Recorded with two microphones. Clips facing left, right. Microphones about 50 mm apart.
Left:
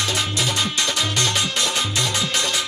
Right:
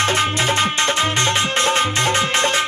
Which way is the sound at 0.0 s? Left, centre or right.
Right.